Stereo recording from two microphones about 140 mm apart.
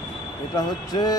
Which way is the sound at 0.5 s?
30° left (ahead or behind).